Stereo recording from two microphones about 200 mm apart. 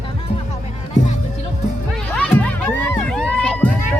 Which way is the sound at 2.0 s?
5° left (ahead or behind).